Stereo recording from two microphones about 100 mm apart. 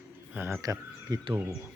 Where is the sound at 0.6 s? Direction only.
35° right (ahead or behind).